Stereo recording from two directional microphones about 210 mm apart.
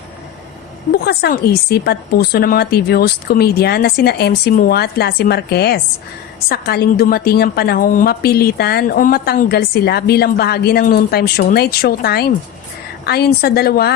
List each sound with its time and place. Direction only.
1.0 s a woman's voice: 50° left (ahead or behind)